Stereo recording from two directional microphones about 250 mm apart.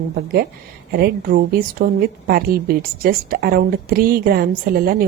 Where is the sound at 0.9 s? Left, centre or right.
Right.